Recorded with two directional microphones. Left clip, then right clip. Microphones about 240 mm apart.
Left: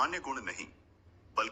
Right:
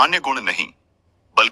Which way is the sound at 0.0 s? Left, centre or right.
Right.